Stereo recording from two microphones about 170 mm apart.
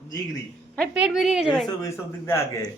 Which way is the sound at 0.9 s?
5° right (ahead or behind).